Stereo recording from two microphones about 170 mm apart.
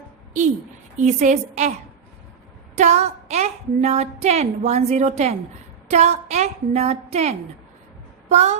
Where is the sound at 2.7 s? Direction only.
40° right (ahead or behind).